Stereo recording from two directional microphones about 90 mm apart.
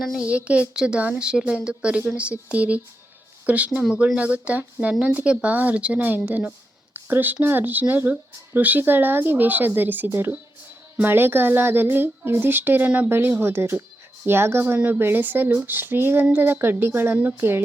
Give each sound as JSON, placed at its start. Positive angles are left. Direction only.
{"t": 0.3, "sound": "speech", "side_deg": -15}